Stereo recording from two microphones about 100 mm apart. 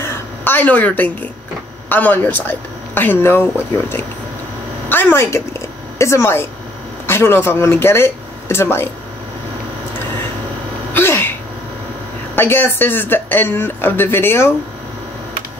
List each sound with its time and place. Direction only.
0.0 s a sound: 20° left (ahead or behind)
1.9 s speech: 15° left (ahead or behind)
4.8 s a sound: 25° left (ahead or behind)
7.1 s speech: 25° left (ahead or behind)
10.9 s sneeze: 20° left (ahead or behind)
12.4 s speech: 25° left (ahead or behind)